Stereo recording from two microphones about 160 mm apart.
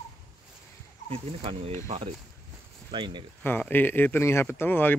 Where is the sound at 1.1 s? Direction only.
35° right (ahead or behind).